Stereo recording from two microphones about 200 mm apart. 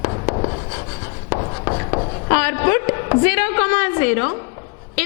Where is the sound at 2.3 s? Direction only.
10° left (ahead or behind).